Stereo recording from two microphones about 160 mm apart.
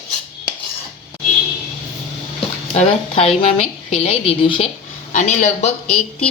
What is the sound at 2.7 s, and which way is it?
A woman's voice, 40° left (ahead or behind).